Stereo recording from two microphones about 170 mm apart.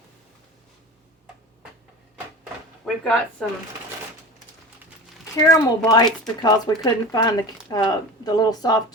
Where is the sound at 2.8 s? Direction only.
5° left (ahead or behind).